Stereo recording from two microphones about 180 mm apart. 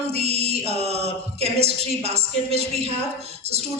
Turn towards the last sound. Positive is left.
turn(degrees=-35)  # may be behind; listen again after turning